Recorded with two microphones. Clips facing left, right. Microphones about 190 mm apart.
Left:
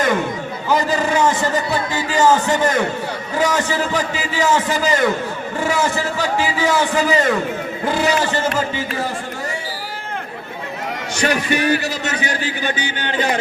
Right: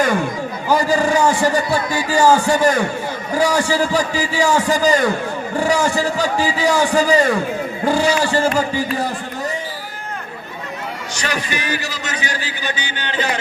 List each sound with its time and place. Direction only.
0.7 s a man's voice: 10° right (ahead or behind)
11.2 s a man's voice: 55° left (ahead or behind)